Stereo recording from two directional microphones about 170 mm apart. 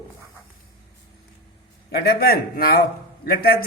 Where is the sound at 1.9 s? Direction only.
65° left (ahead or behind).